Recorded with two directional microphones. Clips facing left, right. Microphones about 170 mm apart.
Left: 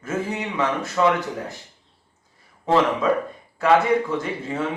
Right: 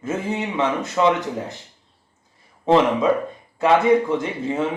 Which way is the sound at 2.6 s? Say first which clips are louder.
Right 3 dB; 20° right (ahead or behind).